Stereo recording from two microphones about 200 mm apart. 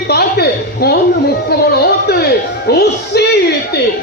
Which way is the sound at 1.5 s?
55° left (ahead or behind).